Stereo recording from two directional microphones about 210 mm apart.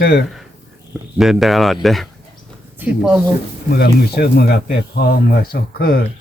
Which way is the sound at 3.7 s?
50° left (ahead or behind).